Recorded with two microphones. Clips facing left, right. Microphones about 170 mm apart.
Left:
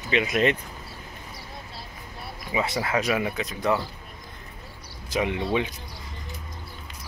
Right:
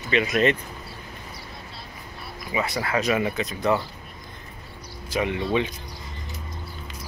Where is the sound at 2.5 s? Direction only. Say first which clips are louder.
Even; 20° left (ahead or behind).